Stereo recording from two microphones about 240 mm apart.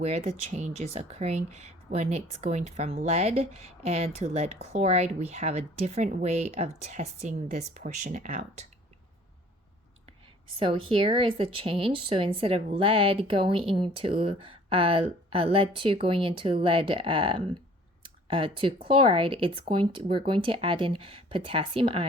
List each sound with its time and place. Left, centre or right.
0.0 s speech: right
10.6 s speech: right